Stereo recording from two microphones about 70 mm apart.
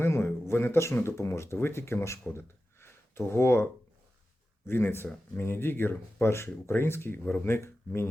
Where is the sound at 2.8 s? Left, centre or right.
Left.